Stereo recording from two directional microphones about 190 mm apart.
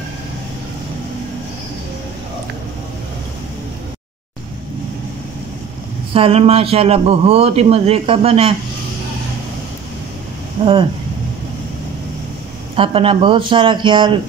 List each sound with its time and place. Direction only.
6.1 s speech: 30° right (ahead or behind)
10.6 s speech: 30° right (ahead or behind)
12.7 s speech: 30° right (ahead or behind)